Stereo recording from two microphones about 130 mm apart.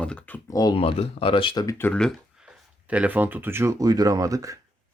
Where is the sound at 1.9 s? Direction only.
5° left (ahead or behind).